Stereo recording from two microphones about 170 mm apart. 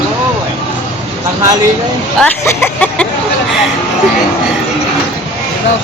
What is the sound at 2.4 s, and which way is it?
Speech, 10° left (ahead or behind).